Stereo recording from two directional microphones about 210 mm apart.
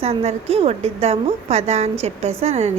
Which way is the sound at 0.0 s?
30° right (ahead or behind).